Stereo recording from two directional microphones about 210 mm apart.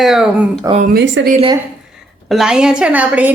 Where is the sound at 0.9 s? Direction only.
55° right (ahead or behind).